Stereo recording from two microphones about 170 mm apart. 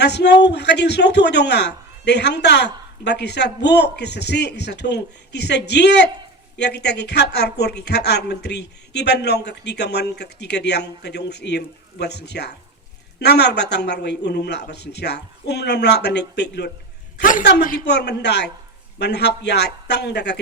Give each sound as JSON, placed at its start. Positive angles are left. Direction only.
{"t": 0.0, "sound": "speech", "side_deg": 80}
{"t": 17.2, "sound": "a woman's voice", "side_deg": 50}
{"t": 17.8, "sound": "speech", "side_deg": 80}